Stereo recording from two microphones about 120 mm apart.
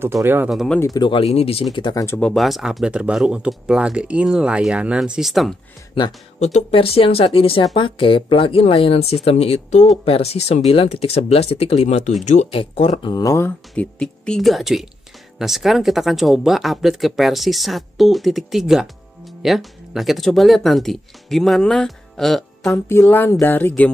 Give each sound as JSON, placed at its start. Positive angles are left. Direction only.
{"t": 0.0, "sound": "speech", "side_deg": -20}
{"t": 0.5, "sound": "speech", "side_deg": 0}
{"t": 0.7, "sound": "speech", "side_deg": 30}
{"t": 1.1, "sound": "speech", "side_deg": 55}
{"t": 2.1, "sound": "speech", "side_deg": 5}
{"t": 6.4, "sound": "speech", "side_deg": 60}
{"t": 12.4, "sound": "speech", "side_deg": 55}
{"t": 13.1, "sound": "speech", "side_deg": 30}
{"t": 13.7, "sound": "speech", "side_deg": 5}
{"t": 22.7, "sound": "speech", "side_deg": 20}
{"t": 23.4, "sound": "a sound", "side_deg": 15}